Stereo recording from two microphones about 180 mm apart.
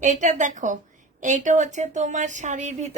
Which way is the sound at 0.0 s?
40° right (ahead or behind).